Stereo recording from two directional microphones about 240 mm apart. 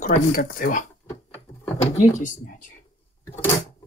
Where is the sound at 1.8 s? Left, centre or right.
Left.